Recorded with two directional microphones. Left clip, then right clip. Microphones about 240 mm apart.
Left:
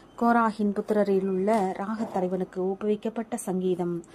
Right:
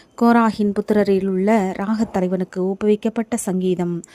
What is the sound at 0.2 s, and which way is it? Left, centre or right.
Speech, right.